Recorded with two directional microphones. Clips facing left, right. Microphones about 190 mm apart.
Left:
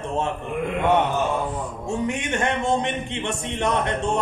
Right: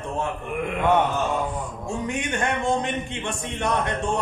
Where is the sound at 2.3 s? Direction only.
25° left (ahead or behind).